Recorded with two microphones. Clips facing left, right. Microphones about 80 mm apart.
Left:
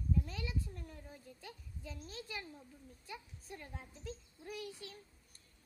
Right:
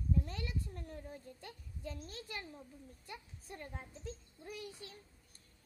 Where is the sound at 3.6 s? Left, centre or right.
Right.